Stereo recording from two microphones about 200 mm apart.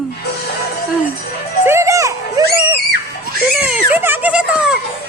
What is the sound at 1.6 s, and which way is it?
Children playing, 15° right (ahead or behind).